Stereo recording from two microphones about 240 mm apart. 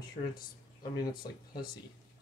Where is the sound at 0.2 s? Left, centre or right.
Left.